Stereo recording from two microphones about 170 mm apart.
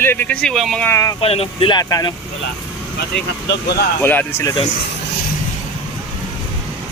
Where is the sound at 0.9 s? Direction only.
15° left (ahead or behind).